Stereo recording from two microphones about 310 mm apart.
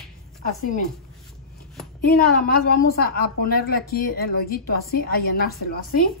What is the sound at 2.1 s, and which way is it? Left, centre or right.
A woman's voice, left.